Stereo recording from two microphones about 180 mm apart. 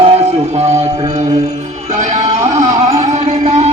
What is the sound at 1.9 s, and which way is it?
Music, 45° right (ahead or behind).